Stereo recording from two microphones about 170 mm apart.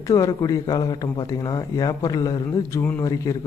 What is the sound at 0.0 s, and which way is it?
Speech, 20° left (ahead or behind).